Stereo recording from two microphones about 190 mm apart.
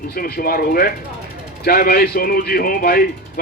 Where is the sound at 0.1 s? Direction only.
50° left (ahead or behind).